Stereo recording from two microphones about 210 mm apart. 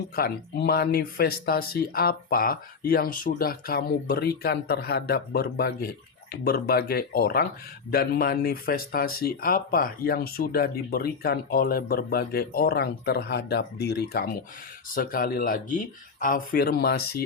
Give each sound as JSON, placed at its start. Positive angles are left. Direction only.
{"t": 0.2, "sound": "speech", "side_deg": 50}